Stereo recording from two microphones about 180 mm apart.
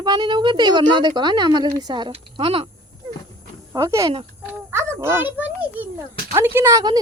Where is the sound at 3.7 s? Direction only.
15° right (ahead or behind).